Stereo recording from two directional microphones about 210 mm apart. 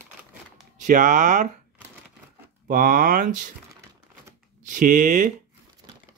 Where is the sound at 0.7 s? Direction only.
40° right (ahead or behind).